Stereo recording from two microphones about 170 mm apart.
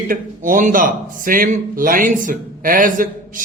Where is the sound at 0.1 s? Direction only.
50° right (ahead or behind).